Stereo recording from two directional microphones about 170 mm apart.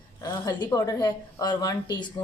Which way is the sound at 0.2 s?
20° left (ahead or behind).